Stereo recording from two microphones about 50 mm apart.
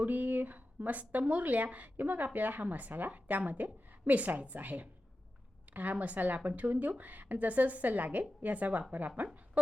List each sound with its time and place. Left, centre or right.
0.0 s speech: right